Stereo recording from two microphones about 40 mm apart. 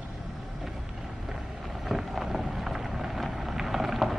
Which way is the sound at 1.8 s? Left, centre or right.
Centre.